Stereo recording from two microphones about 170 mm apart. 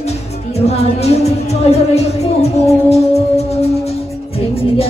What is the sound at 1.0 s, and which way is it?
Speech, 40° left (ahead or behind).